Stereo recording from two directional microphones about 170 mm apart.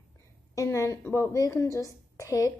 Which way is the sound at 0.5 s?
15° left (ahead or behind).